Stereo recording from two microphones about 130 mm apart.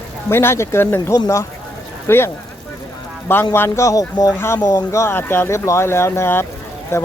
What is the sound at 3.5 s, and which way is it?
Speech, 20° left (ahead or behind).